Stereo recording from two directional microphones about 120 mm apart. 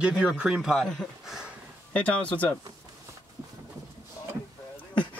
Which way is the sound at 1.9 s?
10° left (ahead or behind).